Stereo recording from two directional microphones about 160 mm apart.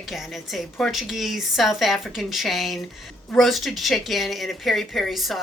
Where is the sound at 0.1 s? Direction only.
Centre (ahead or behind).